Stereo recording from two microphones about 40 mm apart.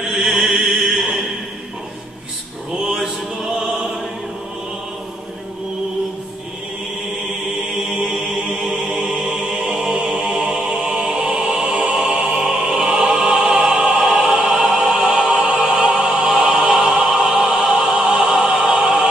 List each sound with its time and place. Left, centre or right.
0.1 s music: centre
2.8 s mantra: centre
3.5 s opera: centre
7.8 s music: centre
12.3 s opera: centre
14.0 s music: centre
16.3 s opera: centre
17.1 s music: centre